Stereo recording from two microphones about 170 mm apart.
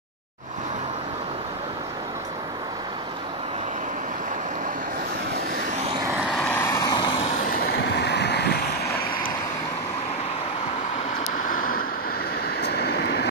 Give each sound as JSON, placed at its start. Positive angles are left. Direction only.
{"t": 6.1, "sound": "vehicle", "side_deg": 5}
{"t": 6.6, "sound": "vehicle", "side_deg": 20}
{"t": 7.9, "sound": "vehicle", "side_deg": 80}
{"t": 11.5, "sound": "vehicle", "side_deg": 50}
{"t": 12.5, "sound": "vehicle", "side_deg": 70}